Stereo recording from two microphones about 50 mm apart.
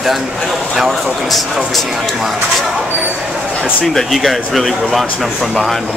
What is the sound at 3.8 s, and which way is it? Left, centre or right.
Speech, centre.